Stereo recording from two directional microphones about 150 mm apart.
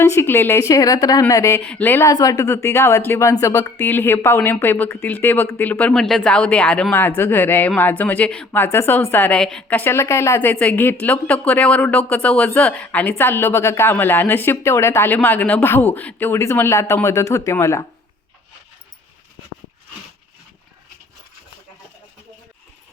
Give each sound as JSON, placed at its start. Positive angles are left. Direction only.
{"t": 0.0, "sound": "a woman's voice", "side_deg": 15}